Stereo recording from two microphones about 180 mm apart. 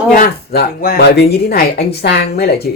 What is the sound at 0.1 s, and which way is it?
Speech, 55° left (ahead or behind).